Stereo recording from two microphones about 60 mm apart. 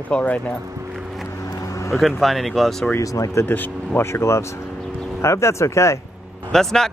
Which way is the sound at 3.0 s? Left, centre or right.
Left.